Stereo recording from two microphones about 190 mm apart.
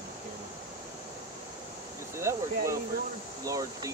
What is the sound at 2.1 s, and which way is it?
Speech, 15° right (ahead or behind).